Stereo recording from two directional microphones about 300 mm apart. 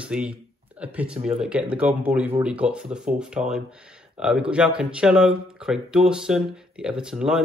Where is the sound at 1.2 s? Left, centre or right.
Centre.